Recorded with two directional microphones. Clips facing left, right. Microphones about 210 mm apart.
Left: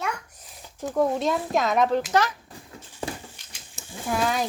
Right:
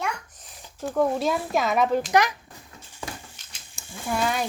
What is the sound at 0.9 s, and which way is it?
Speech, 5° left (ahead or behind).